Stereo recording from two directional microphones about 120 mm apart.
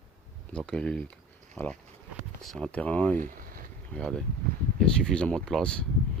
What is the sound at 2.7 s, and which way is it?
Speech, 10° left (ahead or behind).